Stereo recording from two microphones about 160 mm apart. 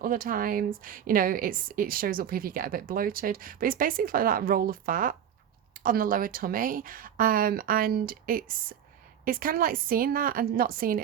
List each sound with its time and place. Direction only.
0.0 s a woman's voice: 60° right (ahead or behind)